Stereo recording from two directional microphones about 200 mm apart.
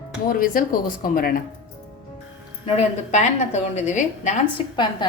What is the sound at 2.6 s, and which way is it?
A woman's voice, 30° left (ahead or behind).